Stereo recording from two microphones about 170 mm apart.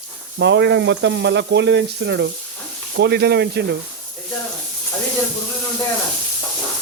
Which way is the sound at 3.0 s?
70° right (ahead or behind).